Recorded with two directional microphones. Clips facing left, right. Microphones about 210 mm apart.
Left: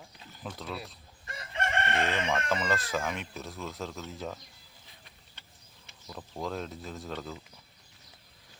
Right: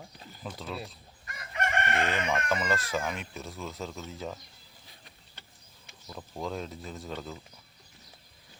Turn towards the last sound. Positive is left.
turn(degrees=0)  # may be behind; listen again after turning